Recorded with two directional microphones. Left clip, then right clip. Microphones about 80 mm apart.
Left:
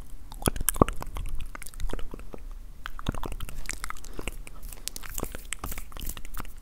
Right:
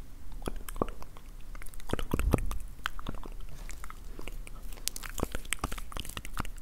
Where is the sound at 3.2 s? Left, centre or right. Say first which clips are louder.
Left 10 dB; left.